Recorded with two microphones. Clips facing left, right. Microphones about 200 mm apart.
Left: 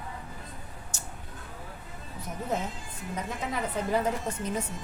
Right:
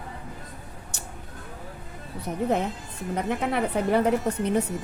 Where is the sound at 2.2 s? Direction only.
65° right (ahead or behind).